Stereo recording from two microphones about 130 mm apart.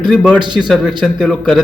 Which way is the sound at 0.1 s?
10° left (ahead or behind).